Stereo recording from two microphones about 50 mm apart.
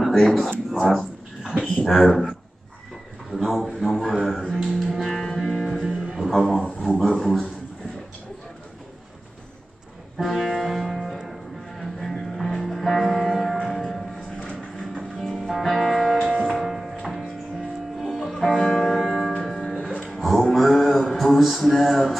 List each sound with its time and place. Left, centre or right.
0.0 s speech: centre
0.7 s a sound: centre
1.6 s speech: centre
4.6 s music: centre
5.9 s music: centre
6.2 s speech: centre
10.1 s music: centre
19.6 s music: left
20.2 s a sound: centre